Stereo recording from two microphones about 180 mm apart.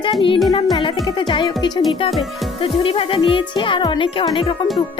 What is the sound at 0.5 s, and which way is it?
Speech, 30° left (ahead or behind).